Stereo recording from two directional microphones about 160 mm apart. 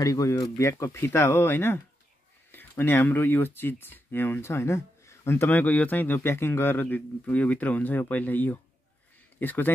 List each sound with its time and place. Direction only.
0.0 s speech: 20° left (ahead or behind)